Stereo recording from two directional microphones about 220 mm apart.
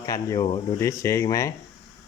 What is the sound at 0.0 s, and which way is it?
Speech, 15° left (ahead or behind).